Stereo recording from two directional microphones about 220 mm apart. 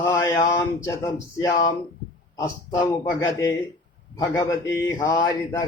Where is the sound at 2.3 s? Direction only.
15° left (ahead or behind).